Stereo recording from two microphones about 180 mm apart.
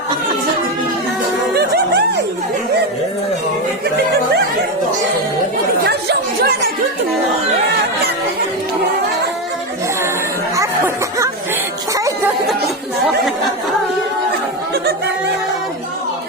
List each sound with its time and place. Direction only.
1.5 s music: 65° right (ahead or behind)
5.8 s chatter: 65° right (ahead or behind)
10.5 s a sound: 15° right (ahead or behind)